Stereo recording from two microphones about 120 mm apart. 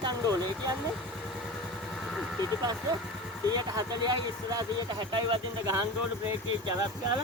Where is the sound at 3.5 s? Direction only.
35° right (ahead or behind).